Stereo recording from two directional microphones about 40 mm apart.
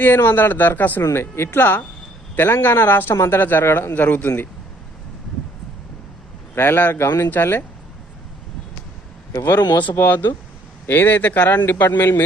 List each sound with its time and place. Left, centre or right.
0.0 s speech: left
1.1 s a man's voice: left
3.9 s speech: left
6.5 s a man's voice: left
7.4 s speech: left
9.5 s a man's voice: left
11.3 s speech: left
11.7 s speech: left